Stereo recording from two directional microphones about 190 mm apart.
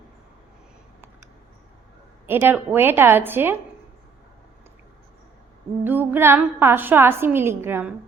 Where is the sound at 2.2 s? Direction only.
10° right (ahead or behind).